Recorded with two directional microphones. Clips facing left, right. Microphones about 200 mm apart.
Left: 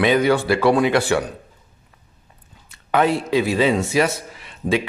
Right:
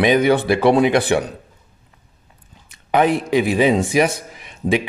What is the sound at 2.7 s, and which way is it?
A man's voice, 15° right (ahead or behind).